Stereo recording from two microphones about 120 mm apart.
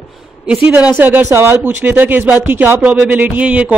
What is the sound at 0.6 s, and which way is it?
A woman's voice, 15° right (ahead or behind).